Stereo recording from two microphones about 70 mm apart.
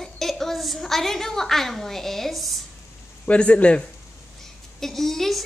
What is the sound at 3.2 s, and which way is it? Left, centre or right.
Speech, centre.